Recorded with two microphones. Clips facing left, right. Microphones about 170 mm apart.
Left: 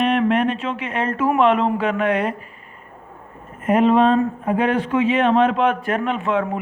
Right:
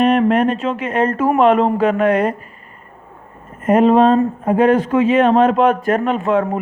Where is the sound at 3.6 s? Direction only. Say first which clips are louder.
Right 4 dB; 40° right (ahead or behind).